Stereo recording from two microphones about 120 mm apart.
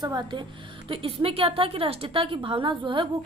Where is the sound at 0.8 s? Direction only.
45° right (ahead or behind).